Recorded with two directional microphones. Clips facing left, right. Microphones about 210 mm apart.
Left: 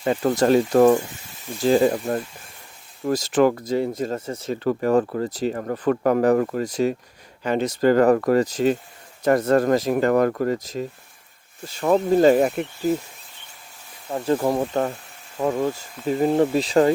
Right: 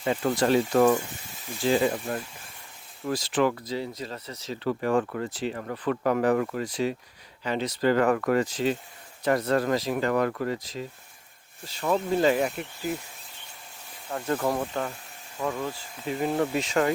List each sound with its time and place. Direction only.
0.0 s speech: 50° left (ahead or behind)
14.1 s speech: 25° left (ahead or behind)
14.7 s speech: 40° left (ahead or behind)